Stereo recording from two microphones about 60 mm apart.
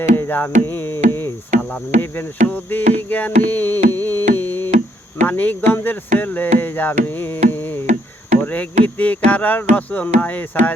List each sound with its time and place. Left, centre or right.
0.0 s music: left
2.0 s a sound: left
8.4 s speech: left